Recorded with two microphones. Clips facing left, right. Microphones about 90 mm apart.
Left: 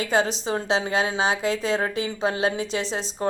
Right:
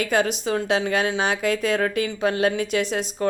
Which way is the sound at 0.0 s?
30° left (ahead or behind).